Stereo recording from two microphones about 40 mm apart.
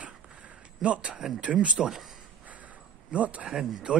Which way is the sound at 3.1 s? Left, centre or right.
Right.